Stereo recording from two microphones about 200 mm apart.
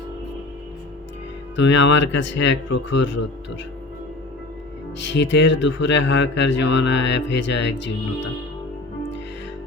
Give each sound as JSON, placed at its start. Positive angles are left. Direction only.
{"t": 1.5, "sound": "speech", "side_deg": 65}
{"t": 4.9, "sound": "speech", "side_deg": 65}